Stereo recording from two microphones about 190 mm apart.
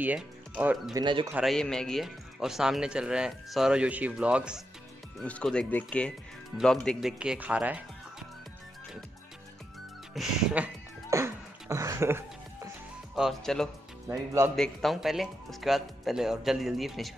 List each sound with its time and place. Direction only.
0.0 s speech: 10° right (ahead or behind)
1.0 s speech: 25° right (ahead or behind)
1.3 s speech: centre (ahead or behind)
5.2 s speech: 5° left (ahead or behind)
10.1 s music: 5° right (ahead or behind)
11.7 s a sound: 15° right (ahead or behind)
13.1 s speech: centre (ahead or behind)
14.0 s speech: 15° right (ahead or behind)
14.5 s speech: centre (ahead or behind)